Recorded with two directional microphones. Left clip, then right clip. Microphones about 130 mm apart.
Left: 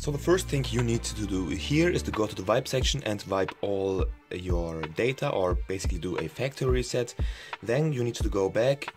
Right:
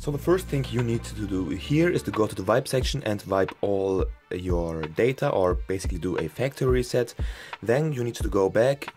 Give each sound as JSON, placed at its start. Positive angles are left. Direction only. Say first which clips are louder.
{"t": 0.0, "sound": "speech", "louder": "right 2 dB", "side_deg": -30}
{"t": 0.5, "sound": "speech", "louder": "right 1 dB", "side_deg": -15}
{"t": 2.2, "sound": "speech", "louder": "right 2 dB", "side_deg": -40}
{"t": 3.6, "sound": "speech", "louder": "right 4 dB", "side_deg": -45}
{"t": 7.6, "sound": "speech", "louder": "right 3 dB", "side_deg": -55}